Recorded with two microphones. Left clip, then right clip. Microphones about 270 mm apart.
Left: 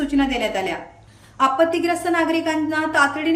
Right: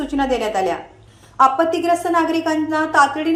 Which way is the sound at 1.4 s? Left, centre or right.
Centre.